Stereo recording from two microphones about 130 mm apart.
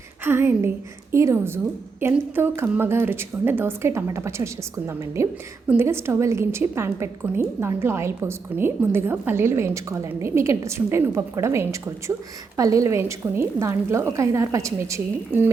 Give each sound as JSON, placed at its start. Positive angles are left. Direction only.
{"t": 0.3, "sound": "a woman's voice", "side_deg": -15}